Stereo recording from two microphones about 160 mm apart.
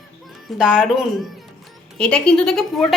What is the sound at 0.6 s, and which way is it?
Speech, 5° right (ahead or behind).